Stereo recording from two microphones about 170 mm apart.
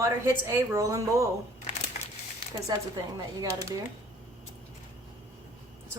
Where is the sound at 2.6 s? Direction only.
20° right (ahead or behind).